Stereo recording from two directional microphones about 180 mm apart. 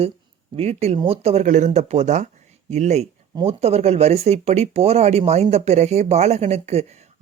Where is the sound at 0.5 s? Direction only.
35° right (ahead or behind).